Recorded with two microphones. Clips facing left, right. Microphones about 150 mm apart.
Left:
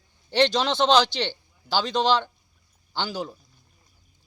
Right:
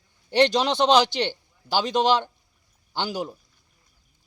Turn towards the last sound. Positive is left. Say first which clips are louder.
# right 2 dB
turn(degrees=-15)  # may be behind; listen again after turning